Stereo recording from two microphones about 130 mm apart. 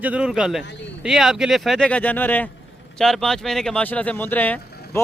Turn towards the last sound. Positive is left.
turn(degrees=15)  # may be behind; listen again after turning